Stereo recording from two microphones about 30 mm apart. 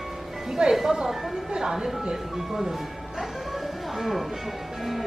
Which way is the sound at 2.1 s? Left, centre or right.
Centre.